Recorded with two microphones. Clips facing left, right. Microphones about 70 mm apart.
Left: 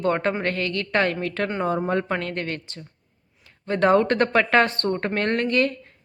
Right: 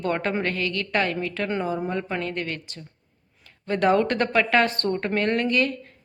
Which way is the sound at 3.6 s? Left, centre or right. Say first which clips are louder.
Left 2 dB; left.